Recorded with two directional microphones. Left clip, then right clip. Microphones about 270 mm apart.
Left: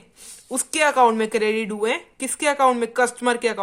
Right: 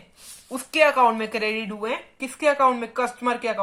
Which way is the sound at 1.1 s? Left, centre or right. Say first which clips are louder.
Left 4 dB; left.